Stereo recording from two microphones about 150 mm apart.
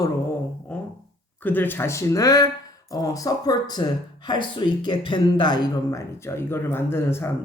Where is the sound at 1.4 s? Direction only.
10° left (ahead or behind).